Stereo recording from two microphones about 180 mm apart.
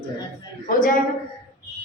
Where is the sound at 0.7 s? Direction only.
50° left (ahead or behind).